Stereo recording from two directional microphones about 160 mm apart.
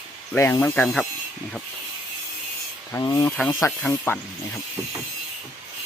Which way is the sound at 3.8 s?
10° left (ahead or behind).